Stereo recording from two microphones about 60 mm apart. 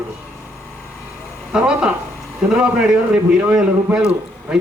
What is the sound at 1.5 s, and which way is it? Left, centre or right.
A man's voice, centre.